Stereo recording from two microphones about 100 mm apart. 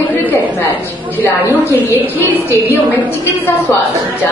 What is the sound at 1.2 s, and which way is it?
A woman's voice, 20° left (ahead or behind).